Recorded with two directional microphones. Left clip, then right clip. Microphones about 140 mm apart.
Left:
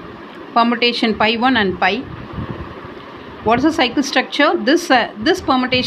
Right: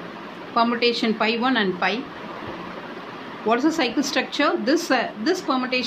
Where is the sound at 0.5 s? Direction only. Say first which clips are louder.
Left 5 dB; 55° left (ahead or behind).